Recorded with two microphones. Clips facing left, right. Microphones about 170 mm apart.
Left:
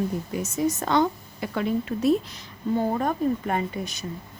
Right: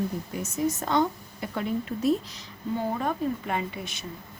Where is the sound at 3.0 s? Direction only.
45° left (ahead or behind).